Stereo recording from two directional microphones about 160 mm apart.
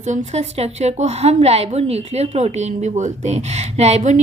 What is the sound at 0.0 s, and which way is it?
A woman's voice, 45° right (ahead or behind).